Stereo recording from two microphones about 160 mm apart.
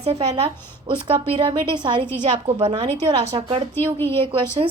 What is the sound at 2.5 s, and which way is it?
Speech, 40° right (ahead or behind).